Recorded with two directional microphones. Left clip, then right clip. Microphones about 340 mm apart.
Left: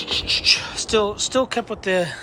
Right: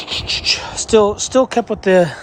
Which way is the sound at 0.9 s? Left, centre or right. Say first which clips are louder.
Right 8 dB; right.